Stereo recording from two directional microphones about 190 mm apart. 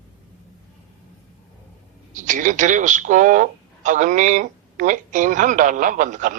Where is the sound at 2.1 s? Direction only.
40° right (ahead or behind).